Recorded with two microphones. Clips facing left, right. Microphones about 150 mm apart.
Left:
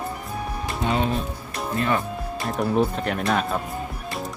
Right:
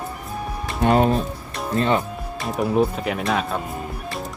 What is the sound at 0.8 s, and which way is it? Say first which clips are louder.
Speech: right 7 dB; 45° right (ahead or behind).